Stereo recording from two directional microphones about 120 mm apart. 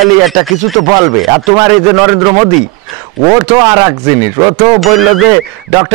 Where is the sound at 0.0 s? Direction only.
Centre (ahead or behind).